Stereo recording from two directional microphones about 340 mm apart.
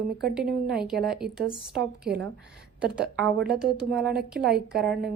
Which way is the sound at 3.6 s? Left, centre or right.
Centre.